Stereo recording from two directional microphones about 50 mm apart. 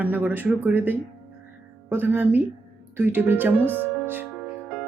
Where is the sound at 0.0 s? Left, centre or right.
Right.